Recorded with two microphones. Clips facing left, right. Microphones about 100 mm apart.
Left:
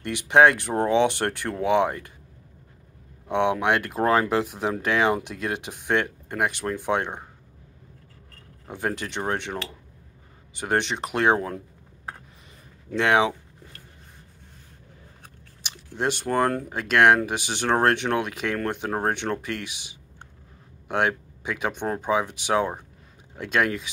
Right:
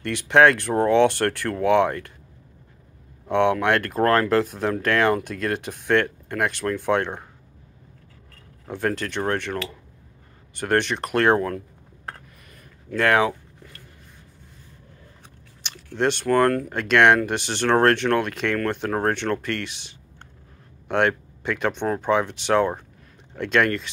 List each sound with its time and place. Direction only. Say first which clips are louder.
0.0 s speech: right 1 dB; 15° left (ahead or behind)
3.3 s speech: right 3 dB; 15° left (ahead or behind)
8.6 s speech: right 3 dB; 15° left (ahead or behind)
12.9 s speech: right 1 dB; 20° left (ahead or behind)
15.6 s speech: right 4 dB; 10° left (ahead or behind)